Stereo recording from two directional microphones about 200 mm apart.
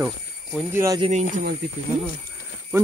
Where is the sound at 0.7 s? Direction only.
15° right (ahead or behind).